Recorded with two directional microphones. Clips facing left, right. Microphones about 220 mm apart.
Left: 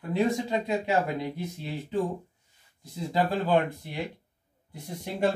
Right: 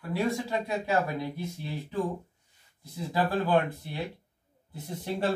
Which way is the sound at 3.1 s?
15° left (ahead or behind).